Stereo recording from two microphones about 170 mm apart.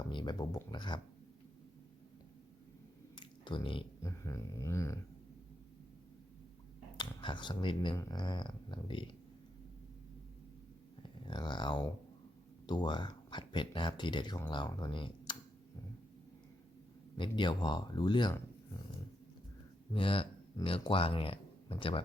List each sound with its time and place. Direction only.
0.1 s speech: 25° left (ahead or behind)
3.2 s a sound: 25° left (ahead or behind)
4.0 s a sound: 15° left (ahead or behind)
6.9 s speech: 25° left (ahead or behind)
11.3 s speech: 25° left (ahead or behind)
17.2 s speech: 30° left (ahead or behind)
19.9 s speech: 30° left (ahead or behind)